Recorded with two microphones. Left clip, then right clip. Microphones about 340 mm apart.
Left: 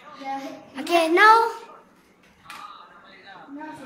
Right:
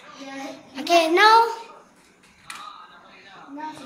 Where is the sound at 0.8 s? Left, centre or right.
Centre.